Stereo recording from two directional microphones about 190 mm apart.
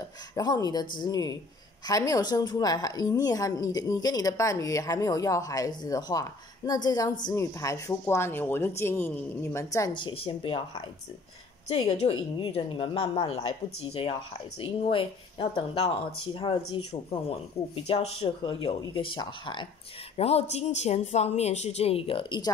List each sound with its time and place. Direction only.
0.4 s a woman's voice: 20° left (ahead or behind)